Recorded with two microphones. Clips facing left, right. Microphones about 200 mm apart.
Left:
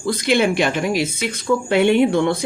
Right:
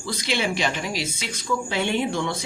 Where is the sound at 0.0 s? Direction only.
55° left (ahead or behind).